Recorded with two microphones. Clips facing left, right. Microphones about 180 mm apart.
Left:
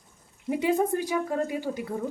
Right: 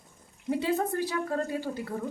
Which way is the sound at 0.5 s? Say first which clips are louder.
Left 3 dB; 15° left (ahead or behind).